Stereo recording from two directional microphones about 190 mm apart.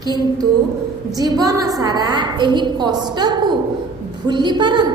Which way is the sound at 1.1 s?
20° right (ahead or behind).